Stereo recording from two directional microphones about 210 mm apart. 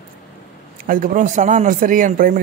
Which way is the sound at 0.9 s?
40° right (ahead or behind).